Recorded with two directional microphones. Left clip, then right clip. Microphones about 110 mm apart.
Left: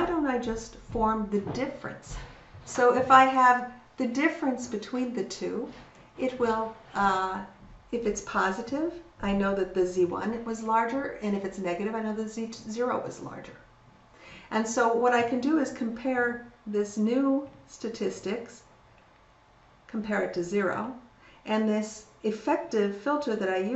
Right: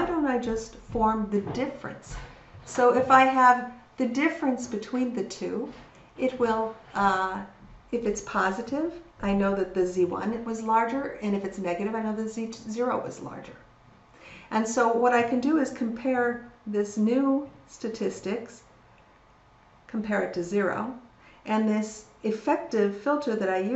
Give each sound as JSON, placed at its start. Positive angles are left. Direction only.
{"t": 0.0, "sound": "a woman's voice", "side_deg": -10}
{"t": 14.2, "sound": "a sound", "side_deg": -5}
{"t": 15.0, "sound": "speech", "side_deg": -10}
{"t": 19.9, "sound": "speech", "side_deg": -10}